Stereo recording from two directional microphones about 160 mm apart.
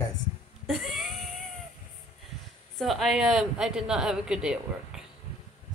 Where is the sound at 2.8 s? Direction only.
Centre (ahead or behind).